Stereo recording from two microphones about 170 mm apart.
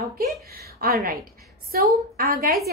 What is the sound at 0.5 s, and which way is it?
A woman's voice, 65° right (ahead or behind).